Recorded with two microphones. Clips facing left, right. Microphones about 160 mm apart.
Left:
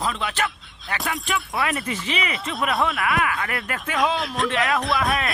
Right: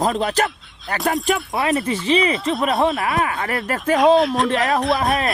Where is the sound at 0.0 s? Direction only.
40° right (ahead or behind).